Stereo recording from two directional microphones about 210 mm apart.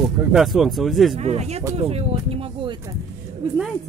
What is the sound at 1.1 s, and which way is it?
Speech, 30° right (ahead or behind).